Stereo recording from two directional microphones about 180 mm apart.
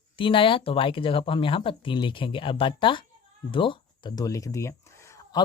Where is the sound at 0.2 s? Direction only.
30° left (ahead or behind).